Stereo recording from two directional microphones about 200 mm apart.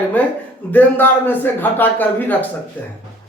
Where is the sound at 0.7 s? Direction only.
10° left (ahead or behind).